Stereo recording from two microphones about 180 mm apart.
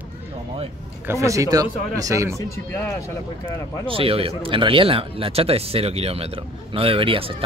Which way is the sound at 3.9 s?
30° right (ahead or behind).